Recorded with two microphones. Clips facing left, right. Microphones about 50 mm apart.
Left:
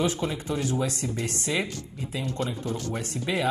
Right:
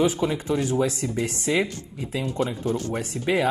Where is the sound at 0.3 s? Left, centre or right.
Right.